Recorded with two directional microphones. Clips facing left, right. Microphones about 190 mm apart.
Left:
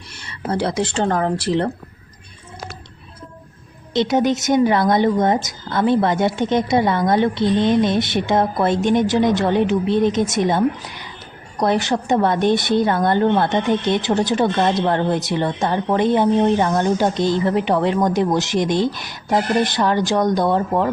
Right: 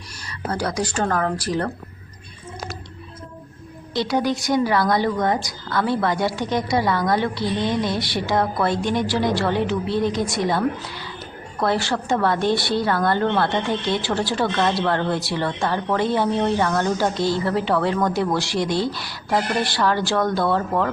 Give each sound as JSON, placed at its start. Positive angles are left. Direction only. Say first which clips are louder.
{"t": 0.1, "sound": "speech", "louder": "left 4 dB", "side_deg": 25}
{"t": 3.9, "sound": "a woman's voice", "louder": "left 4 dB", "side_deg": 20}